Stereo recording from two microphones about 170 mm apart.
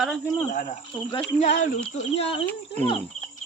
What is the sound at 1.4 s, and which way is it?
Speech, 40° left (ahead or behind).